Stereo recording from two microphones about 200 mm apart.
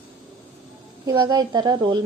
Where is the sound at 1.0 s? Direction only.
20° right (ahead or behind).